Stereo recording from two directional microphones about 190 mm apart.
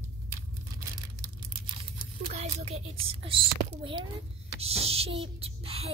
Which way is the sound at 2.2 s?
35° right (ahead or behind).